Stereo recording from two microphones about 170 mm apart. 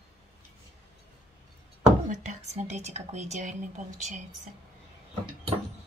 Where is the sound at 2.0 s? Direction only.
45° right (ahead or behind).